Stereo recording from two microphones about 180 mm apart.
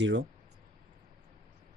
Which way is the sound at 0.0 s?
90° right.